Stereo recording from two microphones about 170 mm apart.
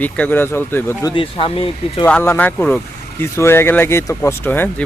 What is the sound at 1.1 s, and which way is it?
Speech, 30° left (ahead or behind).